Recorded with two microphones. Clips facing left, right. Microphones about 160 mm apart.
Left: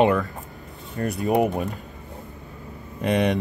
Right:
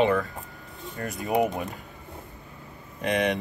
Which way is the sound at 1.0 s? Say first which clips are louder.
Left 7 dB; 35° left (ahead or behind).